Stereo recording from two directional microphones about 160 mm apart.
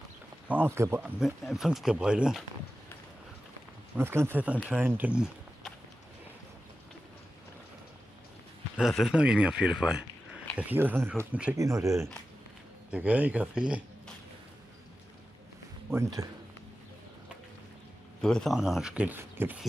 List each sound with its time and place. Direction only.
0.5 s speech: 15° right (ahead or behind)
1.2 s speech: centre (ahead or behind)
3.9 s speech: 15° right (ahead or behind)
8.7 s speech: centre (ahead or behind)
11.5 s speech: 20° right (ahead or behind)
12.9 s speech: 10° right (ahead or behind)
15.9 s speech: 20° right (ahead or behind)
18.2 s speech: 5° left (ahead or behind); by 19.6 s 15° right (ahead or behind)